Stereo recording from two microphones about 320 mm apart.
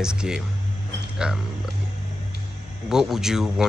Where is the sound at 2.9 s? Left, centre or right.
Centre.